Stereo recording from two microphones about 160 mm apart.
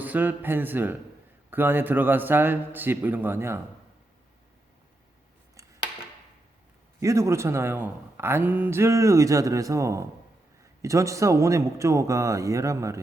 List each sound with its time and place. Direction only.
0.0 s a man's voice: 10° right (ahead or behind)
7.0 s speech: 20° right (ahead or behind)